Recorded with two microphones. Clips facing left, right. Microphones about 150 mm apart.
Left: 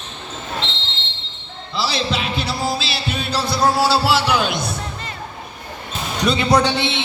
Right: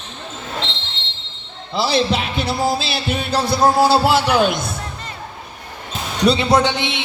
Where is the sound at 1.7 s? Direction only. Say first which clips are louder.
Right 4 dB; 50° right (ahead or behind).